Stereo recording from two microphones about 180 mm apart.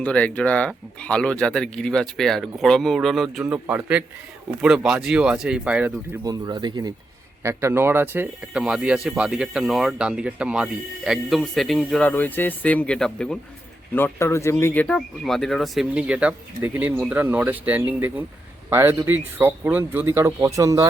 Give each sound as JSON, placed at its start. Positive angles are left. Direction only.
{"t": 0.0, "sound": "speech", "side_deg": 5}
{"t": 6.2, "sound": "speech", "side_deg": -20}